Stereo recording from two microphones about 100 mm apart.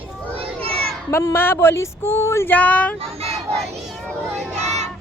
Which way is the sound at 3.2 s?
90° right.